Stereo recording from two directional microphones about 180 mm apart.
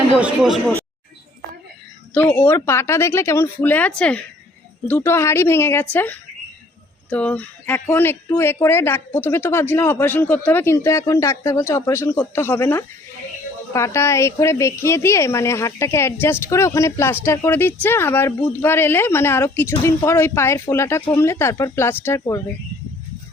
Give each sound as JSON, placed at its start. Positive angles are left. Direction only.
{"t": 0.2, "sound": "speech", "side_deg": 0}
{"t": 2.4, "sound": "speech", "side_deg": 15}